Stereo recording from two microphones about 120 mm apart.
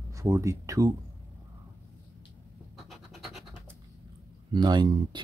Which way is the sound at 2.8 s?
Centre (ahead or behind).